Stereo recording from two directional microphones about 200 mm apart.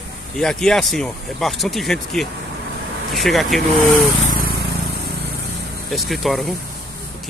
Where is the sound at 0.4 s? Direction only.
5° left (ahead or behind).